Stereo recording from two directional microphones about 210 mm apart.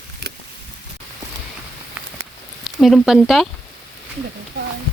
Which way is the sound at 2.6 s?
Centre (ahead or behind).